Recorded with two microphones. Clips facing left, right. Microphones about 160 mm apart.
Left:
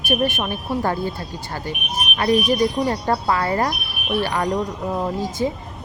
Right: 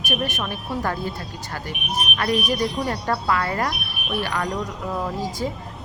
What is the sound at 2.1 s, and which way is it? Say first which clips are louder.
Speech: left 6 dB; 25° left (ahead or behind).